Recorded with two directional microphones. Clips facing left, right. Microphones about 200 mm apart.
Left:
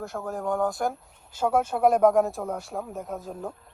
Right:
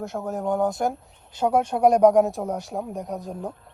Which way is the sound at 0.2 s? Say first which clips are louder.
Right 3 dB; 20° right (ahead or behind).